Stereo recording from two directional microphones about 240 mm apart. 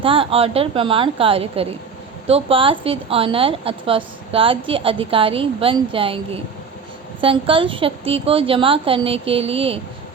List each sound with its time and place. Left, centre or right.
0.0 s a woman's voice: right